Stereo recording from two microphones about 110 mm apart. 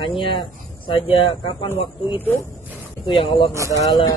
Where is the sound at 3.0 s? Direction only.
50° left (ahead or behind).